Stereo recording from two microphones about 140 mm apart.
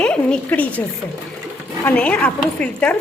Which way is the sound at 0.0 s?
5° left (ahead or behind).